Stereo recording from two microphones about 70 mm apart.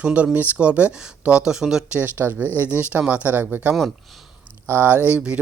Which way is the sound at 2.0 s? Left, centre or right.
Right.